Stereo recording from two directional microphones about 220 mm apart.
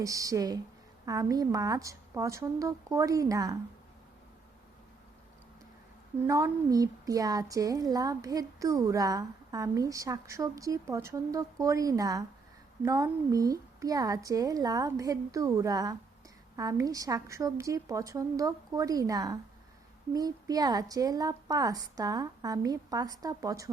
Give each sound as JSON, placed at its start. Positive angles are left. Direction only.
{"t": 0.0, "sound": "a woman's voice", "side_deg": -15}
{"t": 6.2, "sound": "a woman's voice", "side_deg": -15}